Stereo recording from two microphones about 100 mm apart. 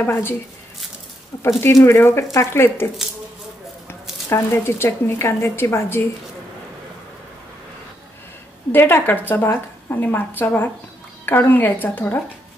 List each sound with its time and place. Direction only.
0.0 s a woman's voice: 20° left (ahead or behind)
1.6 s a woman's voice: 30° left (ahead or behind)
8.7 s a woman's voice: 20° left (ahead or behind)